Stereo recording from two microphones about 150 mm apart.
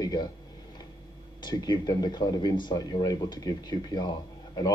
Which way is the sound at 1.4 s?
25° left (ahead or behind).